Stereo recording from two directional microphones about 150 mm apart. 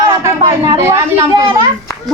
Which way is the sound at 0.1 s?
20° right (ahead or behind).